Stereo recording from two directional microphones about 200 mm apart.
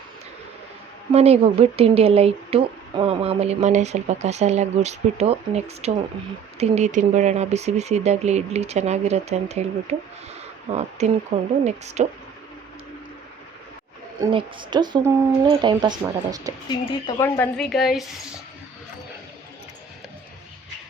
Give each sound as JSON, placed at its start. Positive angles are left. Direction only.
{"t": 1.1, "sound": "speech", "side_deg": -30}
{"t": 14.2, "sound": "speech", "side_deg": -25}
{"t": 16.6, "sound": "speech", "side_deg": 20}
{"t": 17.3, "sound": "a woman's voice", "side_deg": 5}